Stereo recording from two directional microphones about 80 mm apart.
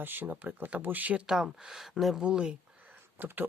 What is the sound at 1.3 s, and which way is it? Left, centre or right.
Speech, centre.